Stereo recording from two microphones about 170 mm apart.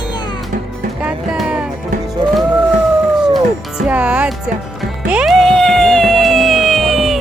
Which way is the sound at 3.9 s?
5° right (ahead or behind).